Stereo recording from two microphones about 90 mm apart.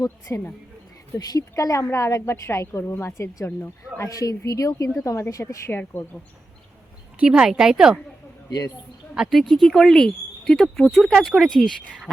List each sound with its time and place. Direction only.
0.0 s a woman's voice: 40° left (ahead or behind)
4.1 s a woman's voice: 40° left (ahead or behind)
5.7 s speech: 25° left (ahead or behind)
7.2 s speech: 10° right (ahead or behind)
8.4 s speech: 45° left (ahead or behind)
9.1 s speech: 5° right (ahead or behind)